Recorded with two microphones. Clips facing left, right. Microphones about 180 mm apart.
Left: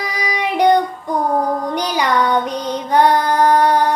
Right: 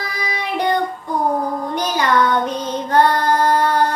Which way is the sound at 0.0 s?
15° left (ahead or behind).